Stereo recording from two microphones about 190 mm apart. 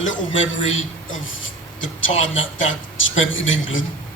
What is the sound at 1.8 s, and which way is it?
A man's voice, 90° left.